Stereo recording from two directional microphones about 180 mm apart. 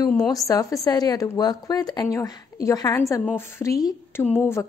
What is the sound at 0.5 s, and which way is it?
A woman's voice, 20° left (ahead or behind).